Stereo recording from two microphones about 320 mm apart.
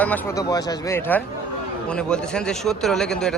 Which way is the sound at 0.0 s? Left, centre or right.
Centre.